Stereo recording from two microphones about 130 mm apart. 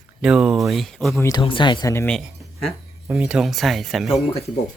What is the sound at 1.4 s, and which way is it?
Speech, 40° left (ahead or behind).